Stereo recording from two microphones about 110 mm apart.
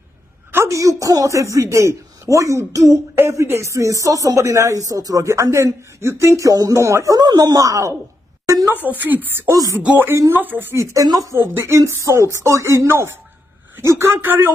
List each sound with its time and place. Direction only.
0.5 s a man's voice: 25° right (ahead or behind)
8.5 s a sound: 30° right (ahead or behind)
8.8 s speech: 15° right (ahead or behind)
9.5 s a man's voice: 30° right (ahead or behind)
9.8 s a man's voice: 15° right (ahead or behind)
11.3 s a man's voice: 20° right (ahead or behind)